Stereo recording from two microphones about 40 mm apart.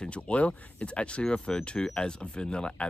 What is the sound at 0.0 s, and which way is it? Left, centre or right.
Speech, left.